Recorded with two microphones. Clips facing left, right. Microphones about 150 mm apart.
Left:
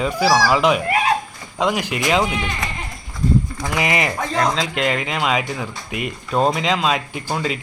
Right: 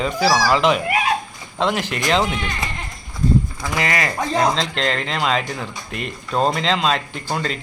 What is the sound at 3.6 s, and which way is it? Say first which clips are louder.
Speech: left 2 dB; 20° left (ahead or behind).